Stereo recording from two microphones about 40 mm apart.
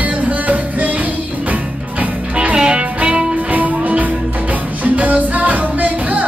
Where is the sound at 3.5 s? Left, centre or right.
Right.